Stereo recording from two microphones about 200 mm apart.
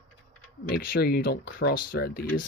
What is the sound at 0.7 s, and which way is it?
Speech, 45° left (ahead or behind).